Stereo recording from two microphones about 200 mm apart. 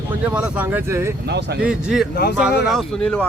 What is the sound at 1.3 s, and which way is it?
Speech, 55° right (ahead or behind).